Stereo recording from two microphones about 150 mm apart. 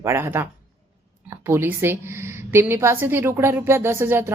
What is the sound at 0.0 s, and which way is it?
Speech, 15° right (ahead or behind).